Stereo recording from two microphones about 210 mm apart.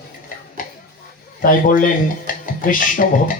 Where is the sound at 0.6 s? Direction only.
40° left (ahead or behind).